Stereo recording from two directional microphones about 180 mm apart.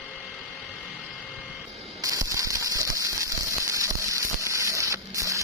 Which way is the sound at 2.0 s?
20° right (ahead or behind).